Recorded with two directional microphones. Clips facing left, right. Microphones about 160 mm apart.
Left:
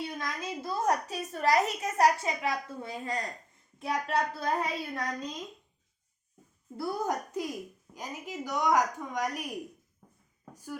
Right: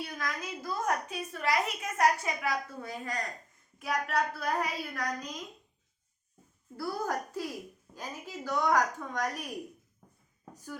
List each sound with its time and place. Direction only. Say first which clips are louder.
0.0 s a woman's voice: left 1 dB; 25° left (ahead or behind)
2.2 s a child's voice: left 1 dB; 25° left (ahead or behind)
6.7 s a child's voice: left 2 dB; 20° left (ahead or behind)
10.5 s a sound: left 3 dB; 10° left (ahead or behind)